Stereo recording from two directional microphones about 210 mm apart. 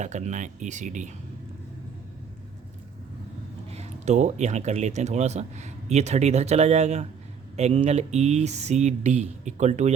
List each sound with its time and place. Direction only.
0.0 s speech: 35° right (ahead or behind)
3.7 s speech: 30° right (ahead or behind)